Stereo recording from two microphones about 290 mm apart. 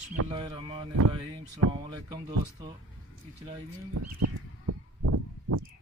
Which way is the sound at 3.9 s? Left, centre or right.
Right.